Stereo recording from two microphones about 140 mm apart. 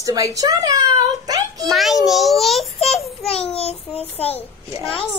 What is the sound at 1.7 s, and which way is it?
A child's voice, centre (ahead or behind).